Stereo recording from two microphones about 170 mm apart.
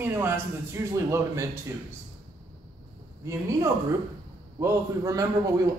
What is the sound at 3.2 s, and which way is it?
A woman's voice, 15° right (ahead or behind).